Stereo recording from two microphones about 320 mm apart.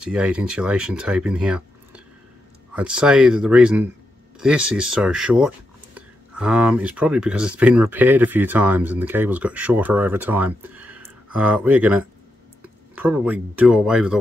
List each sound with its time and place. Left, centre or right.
0.0 s speech: centre